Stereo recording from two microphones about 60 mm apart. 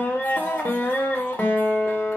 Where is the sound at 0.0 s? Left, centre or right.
Left.